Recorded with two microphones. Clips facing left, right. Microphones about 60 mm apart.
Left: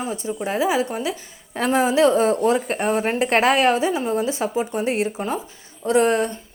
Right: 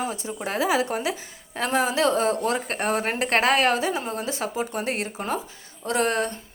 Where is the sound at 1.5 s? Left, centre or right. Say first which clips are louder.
Left 5 dB; left.